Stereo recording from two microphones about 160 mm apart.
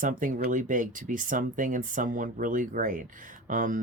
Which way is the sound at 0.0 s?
55° right (ahead or behind).